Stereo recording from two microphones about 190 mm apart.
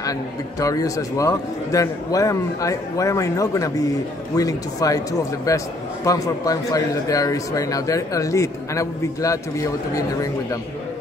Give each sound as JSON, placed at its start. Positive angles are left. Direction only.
{"t": 0.6, "sound": "a man's voice", "side_deg": 15}